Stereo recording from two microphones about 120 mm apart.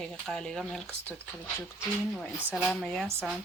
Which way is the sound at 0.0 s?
5° left (ahead or behind).